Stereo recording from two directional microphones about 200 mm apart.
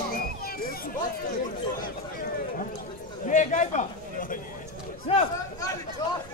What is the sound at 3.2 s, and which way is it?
Speech, 40° left (ahead or behind).